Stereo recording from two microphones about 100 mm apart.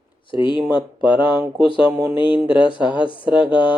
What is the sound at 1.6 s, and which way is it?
Speech, 60° left (ahead or behind).